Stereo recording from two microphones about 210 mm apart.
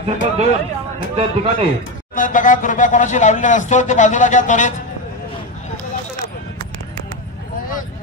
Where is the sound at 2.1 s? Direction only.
40° left (ahead or behind).